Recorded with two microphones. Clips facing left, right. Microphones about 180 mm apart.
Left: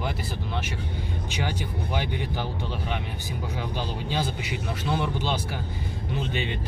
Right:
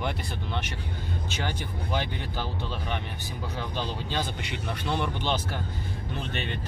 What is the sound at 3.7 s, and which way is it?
Speech, 10° left (ahead or behind).